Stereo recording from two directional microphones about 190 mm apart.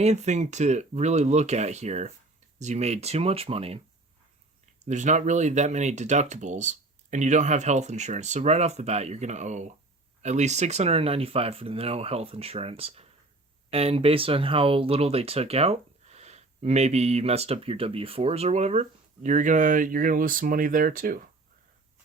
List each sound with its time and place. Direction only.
0.0 s speech: 35° right (ahead or behind)
4.9 s speech: 40° right (ahead or behind)